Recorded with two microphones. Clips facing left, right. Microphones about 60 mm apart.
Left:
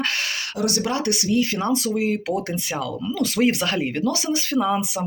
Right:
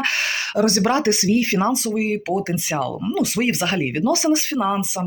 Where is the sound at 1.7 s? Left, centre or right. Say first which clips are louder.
Right 1 dB; centre.